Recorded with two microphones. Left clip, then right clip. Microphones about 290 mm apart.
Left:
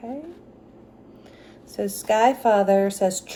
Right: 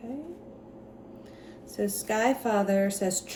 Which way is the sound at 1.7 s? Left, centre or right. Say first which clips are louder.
Left 7 dB; centre.